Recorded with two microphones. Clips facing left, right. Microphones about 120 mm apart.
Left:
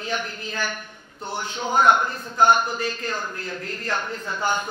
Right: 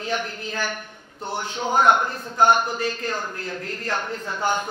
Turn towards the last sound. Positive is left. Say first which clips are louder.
# right 1 dB
turn(degrees=-40)  # may be behind; listen again after turning